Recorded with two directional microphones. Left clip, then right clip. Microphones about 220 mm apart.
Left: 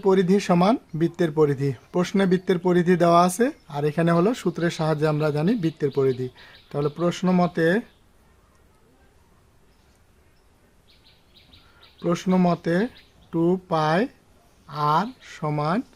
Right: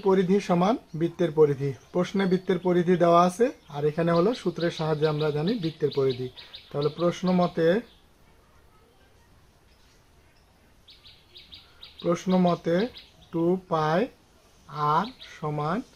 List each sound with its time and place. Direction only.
0.0 s speech: 40° left (ahead or behind)
12.0 s speech: 40° left (ahead or behind)